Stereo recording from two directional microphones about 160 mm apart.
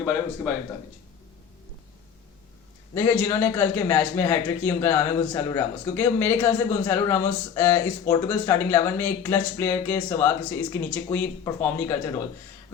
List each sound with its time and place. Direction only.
2.9 s speech: 15° left (ahead or behind)